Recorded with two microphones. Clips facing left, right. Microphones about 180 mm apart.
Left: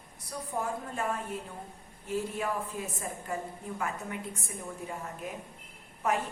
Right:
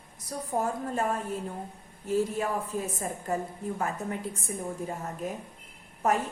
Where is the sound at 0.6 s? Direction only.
40° right (ahead or behind).